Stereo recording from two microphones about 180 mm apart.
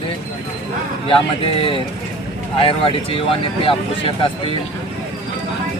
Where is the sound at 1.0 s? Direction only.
30° left (ahead or behind).